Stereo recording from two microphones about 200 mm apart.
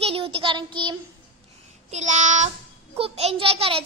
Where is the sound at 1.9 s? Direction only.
35° right (ahead or behind).